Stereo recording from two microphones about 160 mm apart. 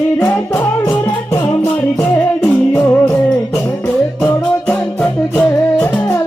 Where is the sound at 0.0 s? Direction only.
15° left (ahead or behind).